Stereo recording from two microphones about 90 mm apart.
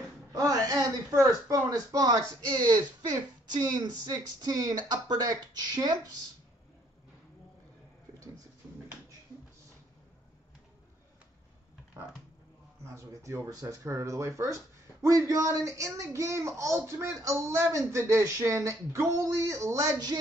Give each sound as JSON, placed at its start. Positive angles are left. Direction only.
{"t": 0.3, "sound": "speech", "side_deg": -45}
{"t": 12.8, "sound": "speech", "side_deg": -30}